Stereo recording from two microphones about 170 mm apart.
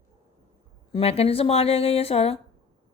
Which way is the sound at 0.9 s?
35° left (ahead or behind).